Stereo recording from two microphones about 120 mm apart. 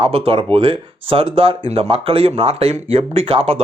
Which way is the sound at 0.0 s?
55° right (ahead or behind).